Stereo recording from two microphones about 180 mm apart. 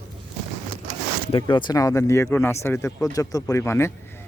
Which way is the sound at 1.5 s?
25° left (ahead or behind).